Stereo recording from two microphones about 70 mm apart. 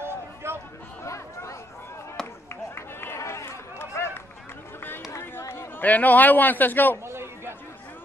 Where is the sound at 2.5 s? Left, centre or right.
Left.